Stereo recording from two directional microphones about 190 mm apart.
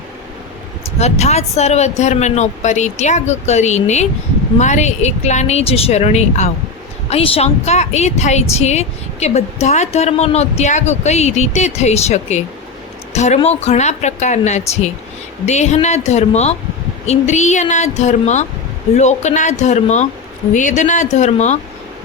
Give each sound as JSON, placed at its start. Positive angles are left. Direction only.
{"t": 0.9, "sound": "a woman's voice", "side_deg": 35}